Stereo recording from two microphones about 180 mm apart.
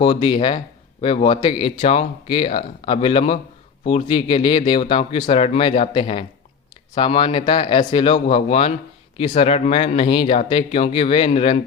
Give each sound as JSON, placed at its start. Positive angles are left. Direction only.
{"t": 0.0, "sound": "speech", "side_deg": 25}